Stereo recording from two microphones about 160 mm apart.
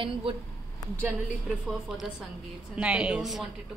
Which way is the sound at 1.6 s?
Centre (ahead or behind).